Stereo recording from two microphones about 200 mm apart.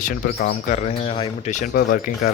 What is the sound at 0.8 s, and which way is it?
Speech, 30° left (ahead or behind).